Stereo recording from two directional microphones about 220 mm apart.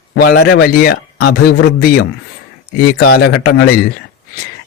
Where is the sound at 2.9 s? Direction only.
45° left (ahead or behind).